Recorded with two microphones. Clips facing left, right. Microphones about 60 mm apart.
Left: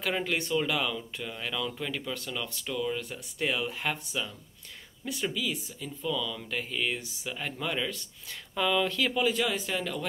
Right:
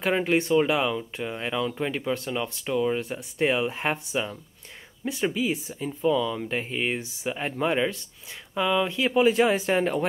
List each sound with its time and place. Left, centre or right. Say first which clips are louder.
0.0 s speech: right 7 dB; right
8.5 s speech: right 3 dB; centre
9.2 s speech: right 11 dB; right